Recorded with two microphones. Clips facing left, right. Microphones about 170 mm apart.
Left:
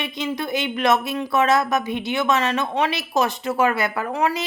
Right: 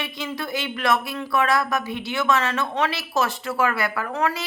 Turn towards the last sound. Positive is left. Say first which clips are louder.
# left 2 dB
turn(degrees=15)  # may be behind; listen again after turning